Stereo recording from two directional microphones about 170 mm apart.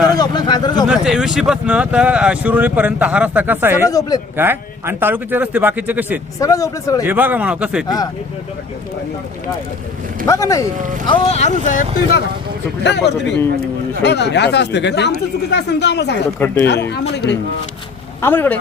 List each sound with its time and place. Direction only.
0.2 s a sound: 25° left (ahead or behind)
0.9 s speech: 5° right (ahead or behind)
3.8 s speech: 20° left (ahead or behind)
4.4 s speech: 10° right (ahead or behind)
6.4 s speech: 20° left (ahead or behind)
7.0 s speech: 10° right (ahead or behind)
10.2 s speech: 20° left (ahead or behind)
11.0 s speech: 30° left (ahead or behind)
12.8 s speech: 90° left
16.4 s speech: 15° left (ahead or behind)
16.9 s a man's voice: 80° left
18.2 s speech: 10° left (ahead or behind)